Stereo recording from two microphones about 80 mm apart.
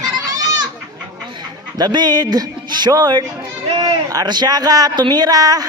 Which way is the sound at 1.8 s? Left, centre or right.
Right.